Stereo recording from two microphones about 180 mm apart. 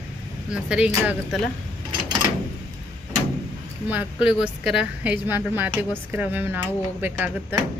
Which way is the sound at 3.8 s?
10° right (ahead or behind).